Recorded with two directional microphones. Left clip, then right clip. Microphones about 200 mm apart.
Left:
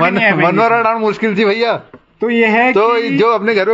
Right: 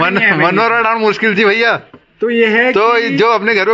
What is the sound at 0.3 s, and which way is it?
A man's voice, centre (ahead or behind).